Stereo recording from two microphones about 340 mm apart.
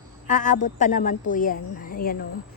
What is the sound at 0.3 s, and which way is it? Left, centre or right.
A woman's voice, left.